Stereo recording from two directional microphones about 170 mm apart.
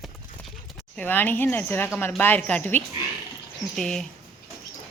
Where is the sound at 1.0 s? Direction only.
10° left (ahead or behind).